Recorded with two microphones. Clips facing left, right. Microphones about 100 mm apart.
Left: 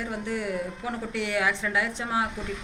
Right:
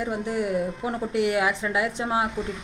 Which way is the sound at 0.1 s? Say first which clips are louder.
Right 4 dB; 15° right (ahead or behind).